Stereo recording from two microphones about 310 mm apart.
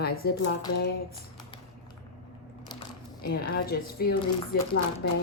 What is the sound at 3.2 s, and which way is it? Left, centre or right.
A woman's voice, left.